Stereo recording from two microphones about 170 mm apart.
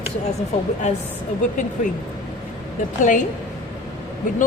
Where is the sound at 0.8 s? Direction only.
40° left (ahead or behind).